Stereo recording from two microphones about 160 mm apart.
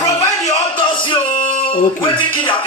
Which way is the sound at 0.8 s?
30° left (ahead or behind).